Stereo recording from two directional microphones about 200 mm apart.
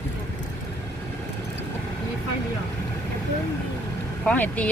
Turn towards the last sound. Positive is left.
turn(degrees=5)  # may be behind; listen again after turning